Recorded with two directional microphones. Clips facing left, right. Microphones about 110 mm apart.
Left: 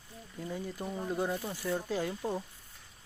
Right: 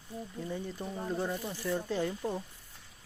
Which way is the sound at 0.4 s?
10° left (ahead or behind).